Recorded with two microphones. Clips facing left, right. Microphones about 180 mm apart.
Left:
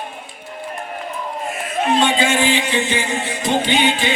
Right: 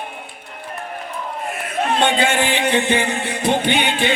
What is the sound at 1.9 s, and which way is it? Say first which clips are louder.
Music: even; 60° right (ahead or behind).